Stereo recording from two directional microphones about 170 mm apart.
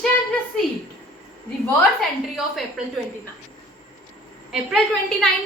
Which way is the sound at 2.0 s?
Centre (ahead or behind).